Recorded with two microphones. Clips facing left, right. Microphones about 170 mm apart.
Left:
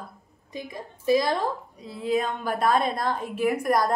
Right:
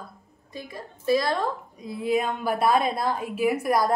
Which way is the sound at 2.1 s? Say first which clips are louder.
Right 1 dB; 10° right (ahead or behind).